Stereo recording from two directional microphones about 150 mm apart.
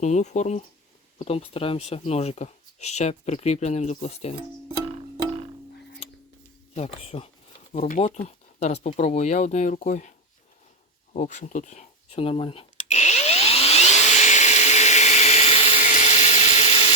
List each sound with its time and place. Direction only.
0.0 s speech: 50° left (ahead or behind)
1.2 s speech: 40° left (ahead or behind)
6.7 s speech: 45° left (ahead or behind)
7.9 s speech: 50° left (ahead or behind)
11.1 s speech: 50° left (ahead or behind)
12.7 s vacuum cleaner: 55° left (ahead or behind)